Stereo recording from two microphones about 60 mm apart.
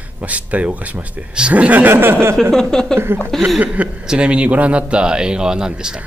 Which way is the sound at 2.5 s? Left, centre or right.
Centre.